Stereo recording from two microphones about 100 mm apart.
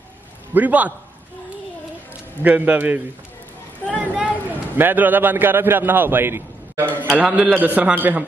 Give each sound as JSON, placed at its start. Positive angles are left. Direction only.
{"t": 0.6, "sound": "a man's voice", "side_deg": -15}
{"t": 2.4, "sound": "a man's voice", "side_deg": -15}